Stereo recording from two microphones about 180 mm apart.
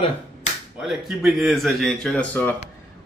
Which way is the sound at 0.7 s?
Centre (ahead or behind).